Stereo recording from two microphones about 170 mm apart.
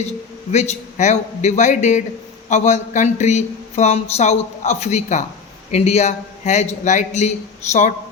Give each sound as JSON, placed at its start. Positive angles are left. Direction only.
{"t": 0.5, "sound": "a man's voice", "side_deg": 40}